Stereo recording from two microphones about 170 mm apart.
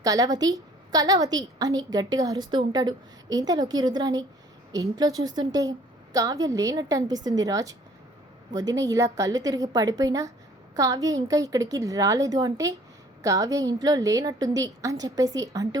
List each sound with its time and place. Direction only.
0.0 s a woman's voice: 20° right (ahead or behind)